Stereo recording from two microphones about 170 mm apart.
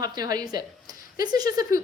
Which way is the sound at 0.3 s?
20° right (ahead or behind).